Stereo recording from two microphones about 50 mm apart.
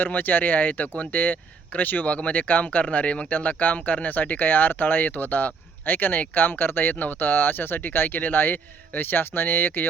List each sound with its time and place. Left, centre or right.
0.0 s speech: left